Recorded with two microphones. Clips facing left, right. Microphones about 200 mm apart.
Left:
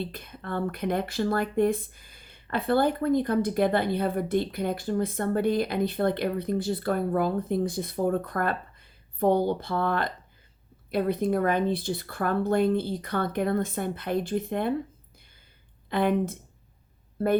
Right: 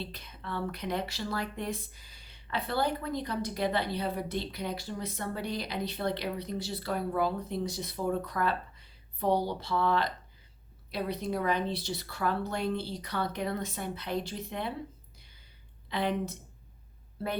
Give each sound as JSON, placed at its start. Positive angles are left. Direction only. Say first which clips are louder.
{"t": 0.0, "sound": "speech", "louder": "left 6 dB", "side_deg": 50}
{"t": 15.9, "sound": "speech", "louder": "left 7 dB", "side_deg": 50}